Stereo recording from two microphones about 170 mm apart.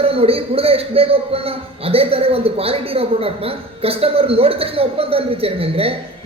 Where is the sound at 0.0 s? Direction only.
35° right (ahead or behind).